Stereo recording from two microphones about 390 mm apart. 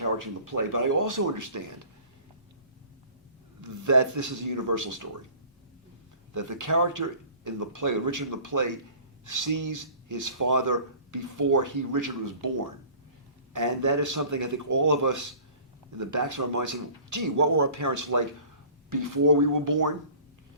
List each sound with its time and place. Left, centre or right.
0.0 s speech: right
3.6 s speech: right
6.3 s speech: right
13.5 s speech: right